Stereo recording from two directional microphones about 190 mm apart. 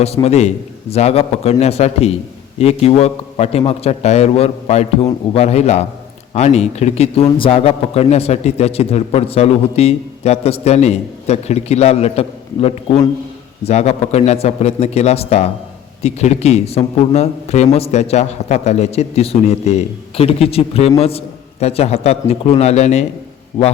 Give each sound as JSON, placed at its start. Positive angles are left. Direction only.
{"t": 0.0, "sound": "a man's voice", "side_deg": 35}